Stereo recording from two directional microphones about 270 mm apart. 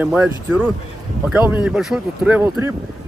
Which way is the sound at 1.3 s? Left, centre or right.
Centre.